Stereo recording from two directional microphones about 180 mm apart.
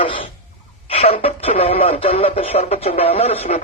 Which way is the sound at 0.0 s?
30° left (ahead or behind).